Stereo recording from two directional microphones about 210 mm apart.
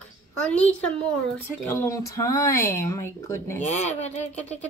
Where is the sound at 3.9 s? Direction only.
30° left (ahead or behind).